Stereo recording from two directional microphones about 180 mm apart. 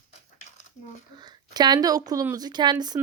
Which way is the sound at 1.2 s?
25° right (ahead or behind).